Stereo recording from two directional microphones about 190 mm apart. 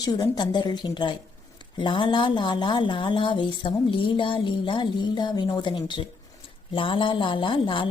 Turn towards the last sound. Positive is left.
turn(degrees=25)  # may be behind; listen again after turning